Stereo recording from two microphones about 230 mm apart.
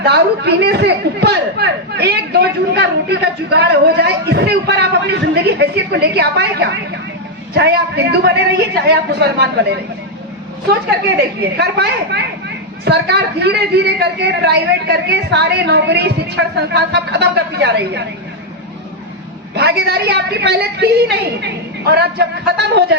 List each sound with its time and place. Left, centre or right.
0.0 s a man's voice: right
11.3 s a man's voice: right
19.5 s a man's voice: right